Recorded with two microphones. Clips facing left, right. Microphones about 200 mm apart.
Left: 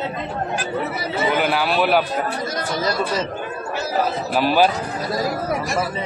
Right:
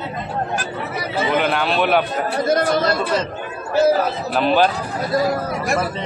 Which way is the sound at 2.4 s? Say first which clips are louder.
Right 6 dB; 55° right (ahead or behind).